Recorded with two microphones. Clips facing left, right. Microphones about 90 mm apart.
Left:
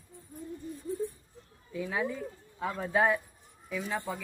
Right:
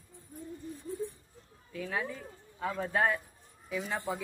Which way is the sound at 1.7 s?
15° left (ahead or behind).